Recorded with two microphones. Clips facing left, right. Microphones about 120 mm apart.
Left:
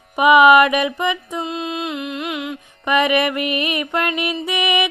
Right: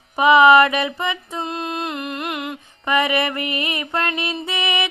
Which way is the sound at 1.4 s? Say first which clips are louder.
Left 1 dB; centre (ahead or behind).